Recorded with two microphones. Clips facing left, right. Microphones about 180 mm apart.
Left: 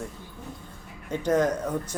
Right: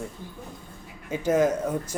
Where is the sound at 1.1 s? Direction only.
5° right (ahead or behind).